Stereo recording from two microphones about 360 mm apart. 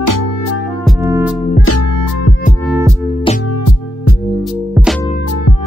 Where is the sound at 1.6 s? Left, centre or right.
Left.